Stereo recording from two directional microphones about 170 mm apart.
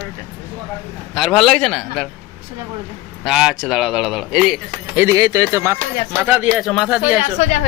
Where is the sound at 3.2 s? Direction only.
Centre (ahead or behind).